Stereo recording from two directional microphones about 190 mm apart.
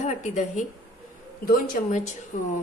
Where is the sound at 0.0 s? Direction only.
40° left (ahead or behind).